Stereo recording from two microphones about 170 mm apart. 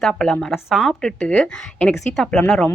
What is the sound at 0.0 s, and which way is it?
A woman's voice, centre (ahead or behind).